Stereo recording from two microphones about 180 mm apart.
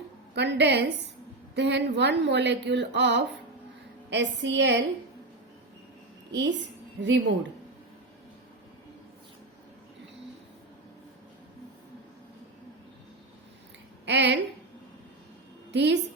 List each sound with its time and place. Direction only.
0.3 s a woman's voice: 75° right (ahead or behind)
6.3 s a woman's voice: 75° right (ahead or behind)
14.0 s speech: 75° right (ahead or behind)
15.7 s a woman's voice: 75° right (ahead or behind)